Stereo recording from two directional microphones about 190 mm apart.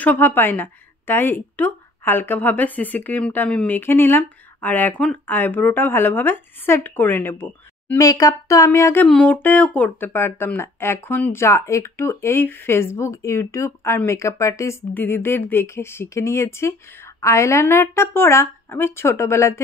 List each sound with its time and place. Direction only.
0.0 s speech: 10° left (ahead or behind)